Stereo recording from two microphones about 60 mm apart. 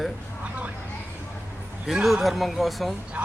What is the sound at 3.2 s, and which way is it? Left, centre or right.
Speech, centre.